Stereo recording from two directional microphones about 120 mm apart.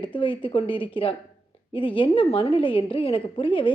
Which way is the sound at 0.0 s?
45° left (ahead or behind).